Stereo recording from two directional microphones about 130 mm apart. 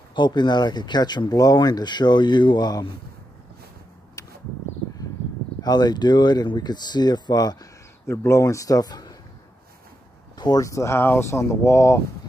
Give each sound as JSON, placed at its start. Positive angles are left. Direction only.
{"t": 0.1, "sound": "speech", "side_deg": 35}
{"t": 5.6, "sound": "speech", "side_deg": 30}
{"t": 8.1, "sound": "speech", "side_deg": 20}
{"t": 10.3, "sound": "speech", "side_deg": 30}